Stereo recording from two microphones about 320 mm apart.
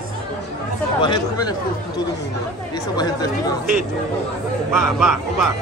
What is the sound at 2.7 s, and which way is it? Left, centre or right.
Speech, centre.